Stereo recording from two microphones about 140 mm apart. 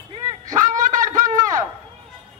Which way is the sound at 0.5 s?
65° right (ahead or behind).